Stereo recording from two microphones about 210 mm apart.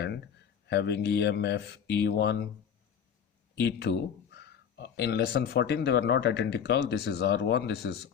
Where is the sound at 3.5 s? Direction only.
50° left (ahead or behind).